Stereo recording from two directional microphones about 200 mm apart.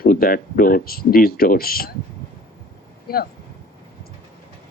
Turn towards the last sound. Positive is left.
turn(degrees=50)  # may be behind; listen again after turning